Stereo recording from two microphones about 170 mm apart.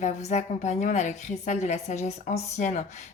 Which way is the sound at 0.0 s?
40° left (ahead or behind).